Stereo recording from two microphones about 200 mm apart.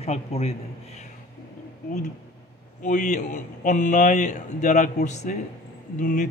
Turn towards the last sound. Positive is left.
turn(degrees=40)  # may be behind; listen again after turning